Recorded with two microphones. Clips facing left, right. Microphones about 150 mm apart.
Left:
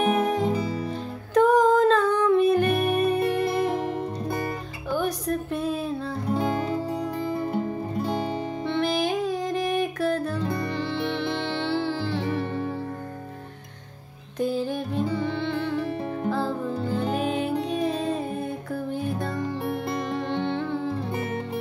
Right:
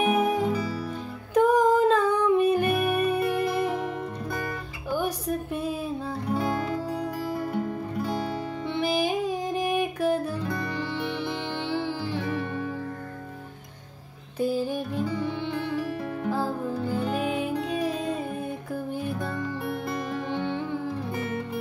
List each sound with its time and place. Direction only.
0.0 s music: 10° right (ahead or behind)
0.5 s music: 25° left (ahead or behind)
1.3 s music: 10° right (ahead or behind)
3.7 s music: 30° left (ahead or behind)
4.9 s music: 10° right (ahead or behind)
6.3 s music: 20° left (ahead or behind)
8.6 s music: 10° right (ahead or behind)
12.3 s music: 35° left (ahead or behind)
14.4 s music: 10° right (ahead or behind)
20.2 s music: 10° right (ahead or behind)
21.1 s music: 30° left (ahead or behind)